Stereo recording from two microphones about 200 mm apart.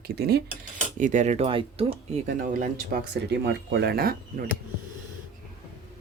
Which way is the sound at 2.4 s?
40° right (ahead or behind).